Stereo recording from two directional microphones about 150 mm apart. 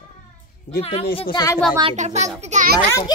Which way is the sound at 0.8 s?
40° left (ahead or behind).